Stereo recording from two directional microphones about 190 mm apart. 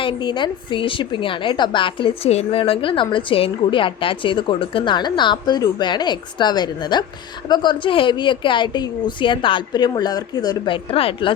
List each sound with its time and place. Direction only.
0.0 s a woman's voice: 25° left (ahead or behind)